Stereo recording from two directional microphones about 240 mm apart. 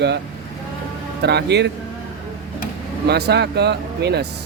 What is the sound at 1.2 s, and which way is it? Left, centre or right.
Speech, right.